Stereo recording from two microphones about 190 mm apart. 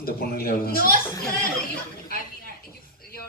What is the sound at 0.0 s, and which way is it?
Speech, 50° left (ahead or behind).